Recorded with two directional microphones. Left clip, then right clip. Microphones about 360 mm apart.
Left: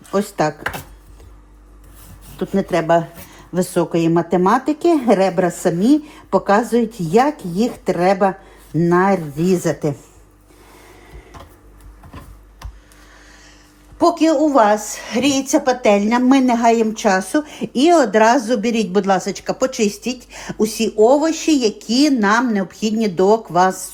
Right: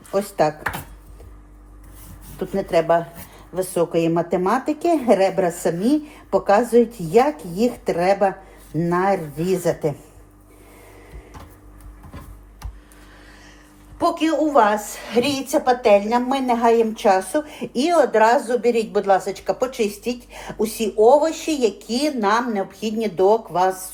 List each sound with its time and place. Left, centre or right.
0.1 s a woman's voice: left
2.4 s a woman's voice: left
14.0 s a woman's voice: centre